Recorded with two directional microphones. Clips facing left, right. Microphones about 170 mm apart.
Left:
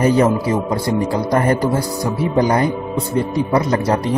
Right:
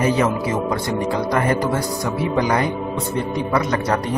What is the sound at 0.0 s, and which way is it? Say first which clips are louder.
Speech: left 4 dB; 40° left (ahead or behind).